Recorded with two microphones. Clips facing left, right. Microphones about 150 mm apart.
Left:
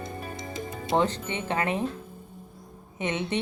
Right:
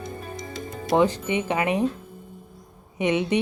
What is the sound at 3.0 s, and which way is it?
Speech, 15° right (ahead or behind).